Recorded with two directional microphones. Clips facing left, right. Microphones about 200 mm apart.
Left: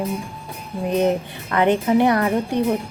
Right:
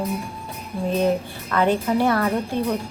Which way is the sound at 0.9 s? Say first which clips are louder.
Left 2 dB; 20° left (ahead or behind).